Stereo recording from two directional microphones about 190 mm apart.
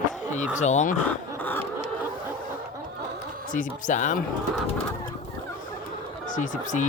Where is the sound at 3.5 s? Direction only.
40° left (ahead or behind).